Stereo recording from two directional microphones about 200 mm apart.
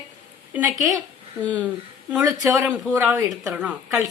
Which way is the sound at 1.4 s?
5° left (ahead or behind).